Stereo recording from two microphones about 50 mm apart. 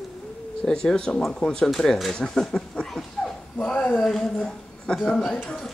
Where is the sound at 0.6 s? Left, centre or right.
Centre.